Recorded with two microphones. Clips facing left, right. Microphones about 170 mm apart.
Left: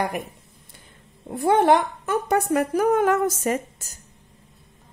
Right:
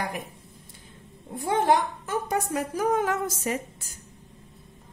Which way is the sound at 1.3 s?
65° left (ahead or behind).